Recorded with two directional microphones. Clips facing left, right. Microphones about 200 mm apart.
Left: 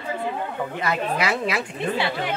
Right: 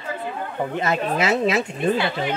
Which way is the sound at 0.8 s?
25° right (ahead or behind).